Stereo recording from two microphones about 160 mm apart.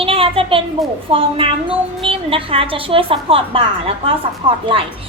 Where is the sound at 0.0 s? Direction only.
35° right (ahead or behind).